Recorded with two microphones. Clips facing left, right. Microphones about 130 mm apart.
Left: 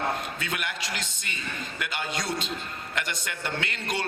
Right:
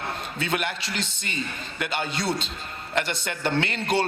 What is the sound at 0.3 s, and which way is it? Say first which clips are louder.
A man's voice: right 5 dB; 30° right (ahead or behind).